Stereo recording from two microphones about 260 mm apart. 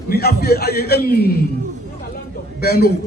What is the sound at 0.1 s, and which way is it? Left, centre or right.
A man's voice, left.